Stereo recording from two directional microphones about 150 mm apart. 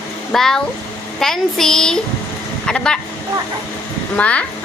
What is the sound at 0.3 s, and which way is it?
A woman's voice, 5° left (ahead or behind).